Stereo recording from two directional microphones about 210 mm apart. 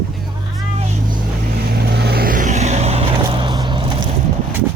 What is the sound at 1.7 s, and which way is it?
Vehicle, 50° right (ahead or behind).